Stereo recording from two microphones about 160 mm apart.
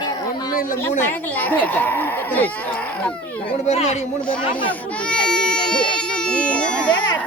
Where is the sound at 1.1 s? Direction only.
10° left (ahead or behind).